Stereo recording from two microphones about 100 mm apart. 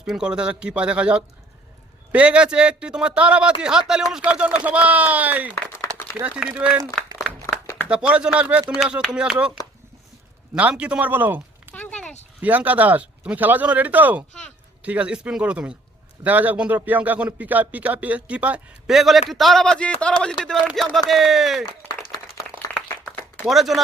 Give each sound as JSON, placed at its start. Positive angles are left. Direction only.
{"t": 0.0, "sound": "speech", "side_deg": -10}
{"t": 7.9, "sound": "speech", "side_deg": -10}
{"t": 10.5, "sound": "speech", "side_deg": -10}
{"t": 11.7, "sound": "a sound", "side_deg": 15}
{"t": 12.4, "sound": "speech", "side_deg": -15}
{"t": 18.9, "sound": "speech", "side_deg": 0}
{"t": 21.8, "sound": "applause", "side_deg": 40}
{"t": 22.7, "sound": "a sound", "side_deg": 15}
{"t": 23.5, "sound": "speech", "side_deg": 0}